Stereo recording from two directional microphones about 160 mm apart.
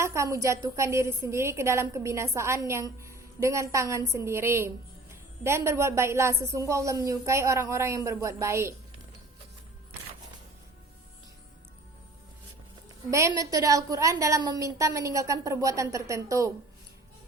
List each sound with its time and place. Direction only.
0.0 s a woman's voice: 20° right (ahead or behind)
13.1 s a woman's voice: 20° right (ahead or behind)